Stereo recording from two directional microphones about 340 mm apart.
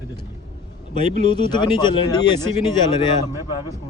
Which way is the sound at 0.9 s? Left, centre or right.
Centre.